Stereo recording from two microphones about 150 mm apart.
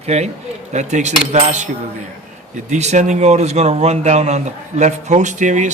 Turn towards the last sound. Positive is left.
turn(degrees=-55)  # may be behind; listen again after turning